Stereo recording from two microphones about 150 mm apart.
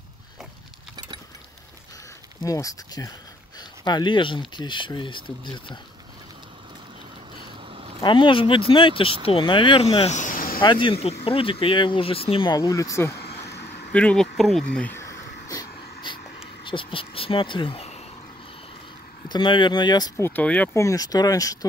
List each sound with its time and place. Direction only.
2.4 s speech: 25° left (ahead or behind)
8.0 s speech: 35° left (ahead or behind); by 10.6 s 65° left (ahead or behind)
10.6 s speech: 35° left (ahead or behind)
12.5 s speech: 20° left (ahead or behind)
13.9 s a sound: 5° left (ahead or behind); by 16.2 s 30° left (ahead or behind)
16.6 s speech: 35° left (ahead or behind)
19.2 s speech: 30° left (ahead or behind)
20.2 s speech: 15° left (ahead or behind)